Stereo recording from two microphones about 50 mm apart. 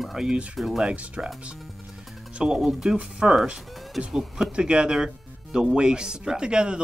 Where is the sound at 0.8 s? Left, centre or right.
Right.